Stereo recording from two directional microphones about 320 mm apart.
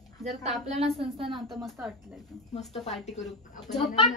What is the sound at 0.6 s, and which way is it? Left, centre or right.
Speech, centre.